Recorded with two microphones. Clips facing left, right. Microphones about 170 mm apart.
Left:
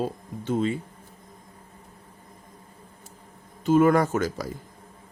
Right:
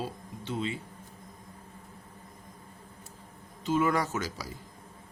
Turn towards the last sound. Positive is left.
turn(degrees=50)  # may be behind; listen again after turning